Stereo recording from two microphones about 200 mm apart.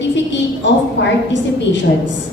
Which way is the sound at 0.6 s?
65° left (ahead or behind).